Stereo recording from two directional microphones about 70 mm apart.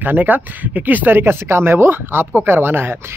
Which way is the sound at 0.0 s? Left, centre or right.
Right.